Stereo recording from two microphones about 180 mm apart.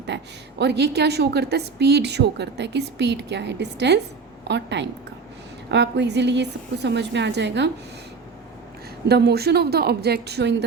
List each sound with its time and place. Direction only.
0.1 s a woman's voice: 75° right (ahead or behind)
9.0 s a woman's voice: 65° right (ahead or behind)